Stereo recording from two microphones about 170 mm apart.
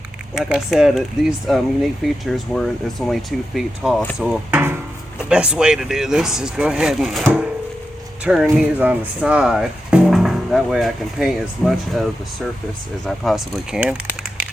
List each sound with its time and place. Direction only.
0.5 s speech: centre (ahead or behind)